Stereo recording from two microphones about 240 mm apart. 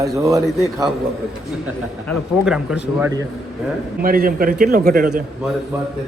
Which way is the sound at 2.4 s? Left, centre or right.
Centre.